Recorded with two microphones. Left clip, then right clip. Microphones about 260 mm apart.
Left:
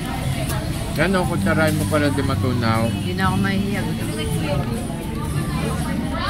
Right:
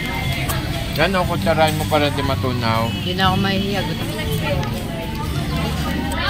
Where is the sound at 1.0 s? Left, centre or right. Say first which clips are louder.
Right 2 dB; left.